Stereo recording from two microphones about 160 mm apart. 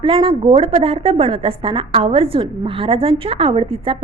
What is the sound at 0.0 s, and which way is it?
A woman's voice, 35° right (ahead or behind).